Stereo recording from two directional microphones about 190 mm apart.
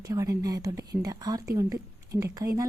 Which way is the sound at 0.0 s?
20° right (ahead or behind).